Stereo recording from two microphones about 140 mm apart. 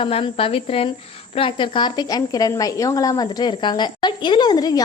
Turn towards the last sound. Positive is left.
turn(degrees=30)  # may be behind; listen again after turning